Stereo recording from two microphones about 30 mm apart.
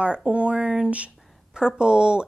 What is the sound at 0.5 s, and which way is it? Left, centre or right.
A woman's voice, right.